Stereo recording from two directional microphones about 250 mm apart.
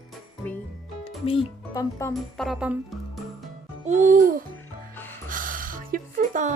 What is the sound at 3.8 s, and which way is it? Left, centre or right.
Music, right.